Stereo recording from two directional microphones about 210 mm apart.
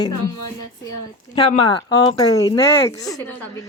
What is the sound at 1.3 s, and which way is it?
A woman's voice, 25° left (ahead or behind).